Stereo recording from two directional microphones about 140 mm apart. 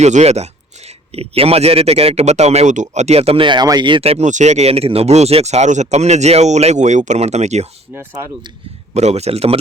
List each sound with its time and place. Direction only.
0.0 s speech: 50° right (ahead or behind)
9.0 s speech: 50° right (ahead or behind)